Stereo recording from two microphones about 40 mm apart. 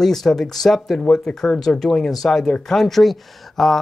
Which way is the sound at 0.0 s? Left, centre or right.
Centre.